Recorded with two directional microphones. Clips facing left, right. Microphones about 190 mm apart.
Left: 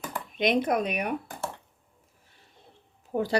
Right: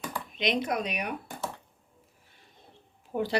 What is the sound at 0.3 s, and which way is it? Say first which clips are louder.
Speech: left 5 dB; 50° left (ahead or behind).